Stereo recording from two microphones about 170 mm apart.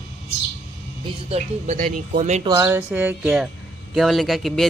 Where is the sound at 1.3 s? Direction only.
40° right (ahead or behind).